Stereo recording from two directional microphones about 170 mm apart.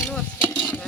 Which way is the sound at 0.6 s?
10° left (ahead or behind).